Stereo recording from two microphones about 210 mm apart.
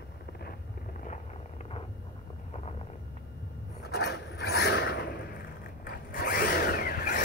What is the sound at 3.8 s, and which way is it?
Rub, 50° left (ahead or behind).